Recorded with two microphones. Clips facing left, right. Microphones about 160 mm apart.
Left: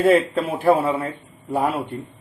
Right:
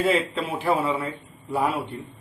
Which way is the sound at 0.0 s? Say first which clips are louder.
Left 6 dB; 45° left (ahead or behind).